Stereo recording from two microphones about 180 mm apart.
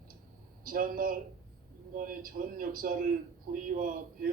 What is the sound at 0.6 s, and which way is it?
A man's voice, 50° right (ahead or behind).